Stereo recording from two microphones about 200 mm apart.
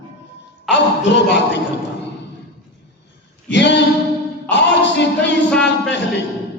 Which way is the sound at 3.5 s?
60° left (ahead or behind).